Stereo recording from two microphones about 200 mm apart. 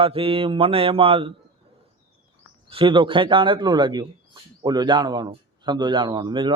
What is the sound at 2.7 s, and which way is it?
A man's voice, 25° right (ahead or behind).